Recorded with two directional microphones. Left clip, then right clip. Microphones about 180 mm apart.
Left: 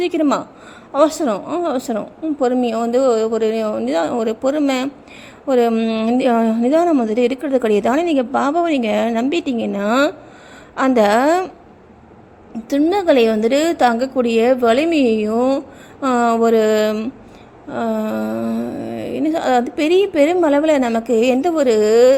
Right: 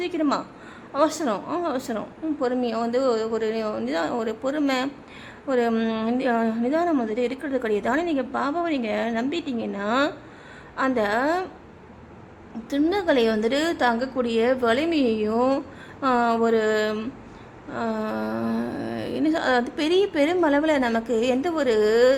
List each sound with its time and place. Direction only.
0.0 s a woman's voice: 30° left (ahead or behind)
12.6 s a woman's voice: 25° left (ahead or behind)